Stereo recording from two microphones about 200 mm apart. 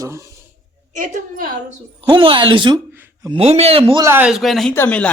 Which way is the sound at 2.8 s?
10° right (ahead or behind).